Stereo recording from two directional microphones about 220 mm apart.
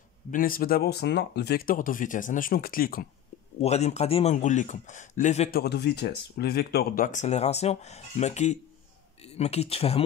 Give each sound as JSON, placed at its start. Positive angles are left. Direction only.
{"t": 0.3, "sound": "speech", "side_deg": 40}
{"t": 3.6, "sound": "speech", "side_deg": 30}
{"t": 5.6, "sound": "speech", "side_deg": 50}